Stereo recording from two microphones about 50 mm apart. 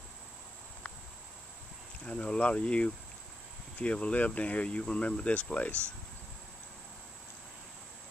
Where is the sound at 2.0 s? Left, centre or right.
Left.